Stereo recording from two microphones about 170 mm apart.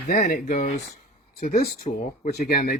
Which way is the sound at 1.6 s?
65° left (ahead or behind).